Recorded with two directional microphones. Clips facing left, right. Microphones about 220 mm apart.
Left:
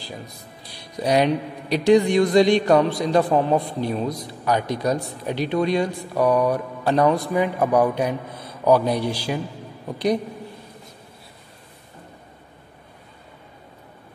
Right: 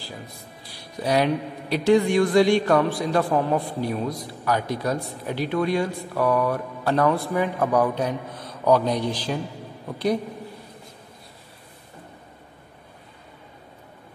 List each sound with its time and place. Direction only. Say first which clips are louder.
0.9 s a man's voice: left 2 dB; 20° left (ahead or behind)